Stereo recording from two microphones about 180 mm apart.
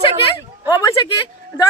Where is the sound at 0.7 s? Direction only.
20° left (ahead or behind).